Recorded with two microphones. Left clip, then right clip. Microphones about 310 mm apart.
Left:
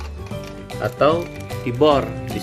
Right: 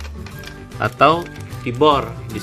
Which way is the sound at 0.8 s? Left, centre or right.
Centre.